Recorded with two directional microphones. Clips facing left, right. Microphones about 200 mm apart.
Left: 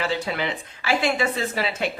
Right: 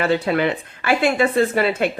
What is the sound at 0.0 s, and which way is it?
Speech, 55° right (ahead or behind).